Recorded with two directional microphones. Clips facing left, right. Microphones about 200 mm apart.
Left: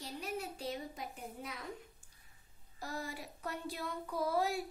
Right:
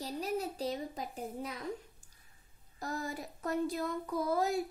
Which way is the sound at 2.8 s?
45° right (ahead or behind).